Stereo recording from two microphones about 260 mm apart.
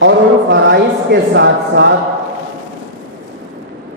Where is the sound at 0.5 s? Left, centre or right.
Right.